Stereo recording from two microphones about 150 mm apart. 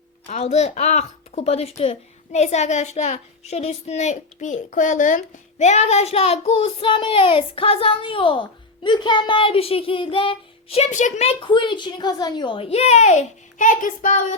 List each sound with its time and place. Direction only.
0.3 s a woman's voice: 45° left (ahead or behind)